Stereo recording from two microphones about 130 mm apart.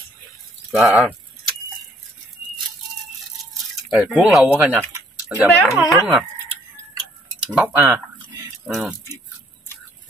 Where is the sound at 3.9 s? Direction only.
10° right (ahead or behind).